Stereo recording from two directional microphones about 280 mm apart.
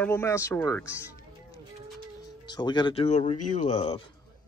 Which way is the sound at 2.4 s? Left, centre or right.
Centre.